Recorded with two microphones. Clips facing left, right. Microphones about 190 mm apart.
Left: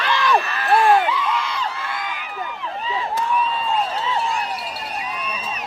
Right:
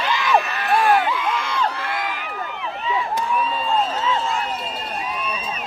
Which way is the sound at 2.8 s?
30° left (ahead or behind).